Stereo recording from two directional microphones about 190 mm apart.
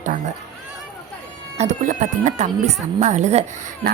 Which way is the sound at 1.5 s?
40° right (ahead or behind).